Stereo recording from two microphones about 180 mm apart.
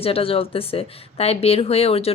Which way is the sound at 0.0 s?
30° left (ahead or behind).